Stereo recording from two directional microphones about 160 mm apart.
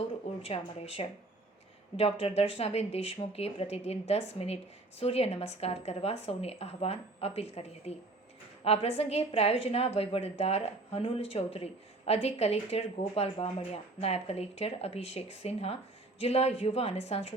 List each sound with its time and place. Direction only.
0.4 s a woman's voice: 40° left (ahead or behind)